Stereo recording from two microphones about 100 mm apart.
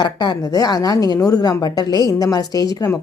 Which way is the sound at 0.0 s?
45° left (ahead or behind).